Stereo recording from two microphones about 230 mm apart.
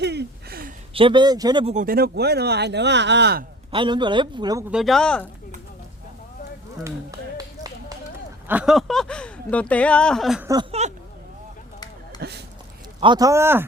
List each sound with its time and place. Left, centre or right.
0.0 s a sound: right
0.9 s speech: right
1.7 s speech: right
3.7 s speech: right
4.7 s speech: centre
6.8 s finger snapping: centre
8.4 s speech: centre
10.5 s speech: right
12.2 s speech: right
13.0 s speech: centre